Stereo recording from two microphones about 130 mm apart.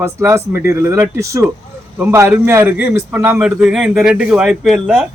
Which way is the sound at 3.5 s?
5° right (ahead or behind).